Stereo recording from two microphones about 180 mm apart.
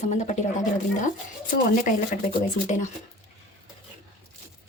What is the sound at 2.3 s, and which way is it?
Speech, 45° left (ahead or behind).